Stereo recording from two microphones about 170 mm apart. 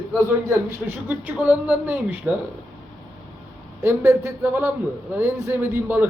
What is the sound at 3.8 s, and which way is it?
Speech, 15° right (ahead or behind).